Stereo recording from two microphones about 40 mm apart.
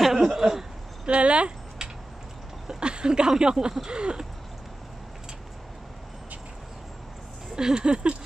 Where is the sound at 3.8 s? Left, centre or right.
Right.